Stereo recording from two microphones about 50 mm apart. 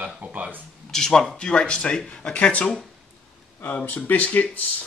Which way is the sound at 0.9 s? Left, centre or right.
Centre.